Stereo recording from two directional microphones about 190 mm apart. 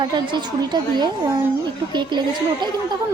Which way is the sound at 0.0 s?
25° right (ahead or behind).